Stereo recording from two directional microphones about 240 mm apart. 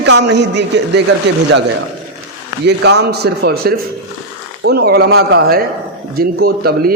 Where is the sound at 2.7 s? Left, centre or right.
Right.